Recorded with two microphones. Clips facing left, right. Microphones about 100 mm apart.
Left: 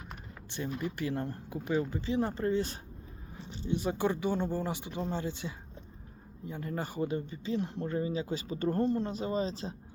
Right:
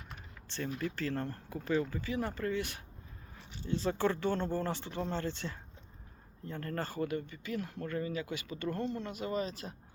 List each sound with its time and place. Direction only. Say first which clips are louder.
0.4 s speech: left 1 dB; 15° left (ahead or behind)